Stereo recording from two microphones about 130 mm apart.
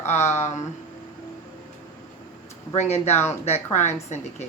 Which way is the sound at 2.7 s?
60° left (ahead or behind).